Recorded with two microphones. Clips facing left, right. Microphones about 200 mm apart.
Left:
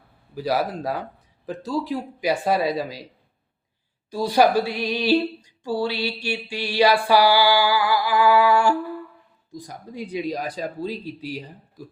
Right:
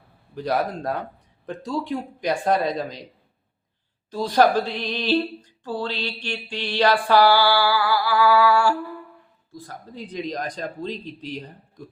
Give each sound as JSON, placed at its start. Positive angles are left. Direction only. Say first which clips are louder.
{"t": 0.3, "sound": "speech", "louder": "left 1 dB", "side_deg": 5}
{"t": 4.1, "sound": "speech", "louder": "even", "side_deg": 10}